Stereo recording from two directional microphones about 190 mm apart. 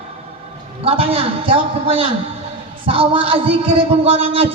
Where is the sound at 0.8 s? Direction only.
30° right (ahead or behind).